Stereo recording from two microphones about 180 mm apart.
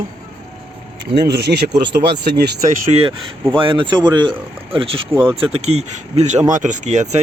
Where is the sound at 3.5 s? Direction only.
25° right (ahead or behind).